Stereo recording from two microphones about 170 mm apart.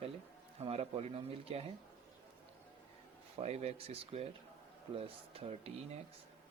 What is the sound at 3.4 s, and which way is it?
Speech, 40° right (ahead or behind).